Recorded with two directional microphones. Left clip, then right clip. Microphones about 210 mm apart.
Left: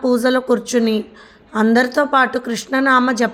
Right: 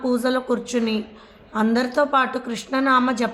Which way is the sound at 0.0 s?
30° left (ahead or behind).